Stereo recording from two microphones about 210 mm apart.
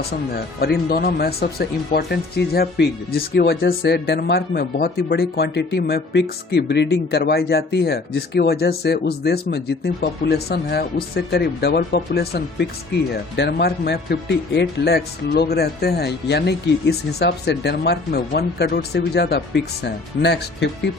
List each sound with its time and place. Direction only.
0.9 s speech: 45° left (ahead or behind)